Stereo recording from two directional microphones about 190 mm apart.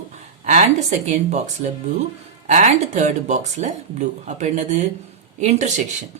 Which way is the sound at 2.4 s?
40° right (ahead or behind).